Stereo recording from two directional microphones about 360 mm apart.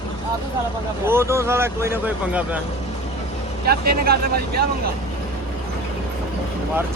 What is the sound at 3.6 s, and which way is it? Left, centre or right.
Speech, right.